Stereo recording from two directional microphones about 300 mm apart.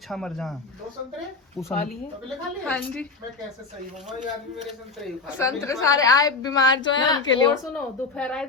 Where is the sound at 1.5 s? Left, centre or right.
Centre.